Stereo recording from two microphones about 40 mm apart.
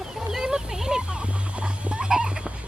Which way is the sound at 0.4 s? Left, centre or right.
Centre.